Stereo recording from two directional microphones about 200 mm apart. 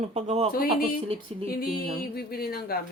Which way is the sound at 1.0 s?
30° right (ahead or behind).